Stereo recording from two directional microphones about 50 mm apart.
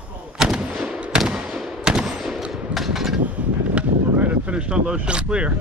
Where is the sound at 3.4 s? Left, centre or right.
Right.